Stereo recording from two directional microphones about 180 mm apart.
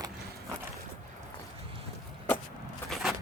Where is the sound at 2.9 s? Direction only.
Centre (ahead or behind).